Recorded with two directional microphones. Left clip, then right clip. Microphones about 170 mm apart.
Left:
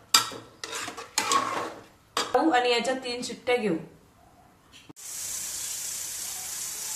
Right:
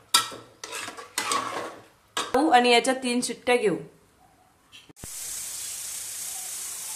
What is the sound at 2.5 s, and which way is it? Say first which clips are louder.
A woman's voice: right 5 dB; 90° right.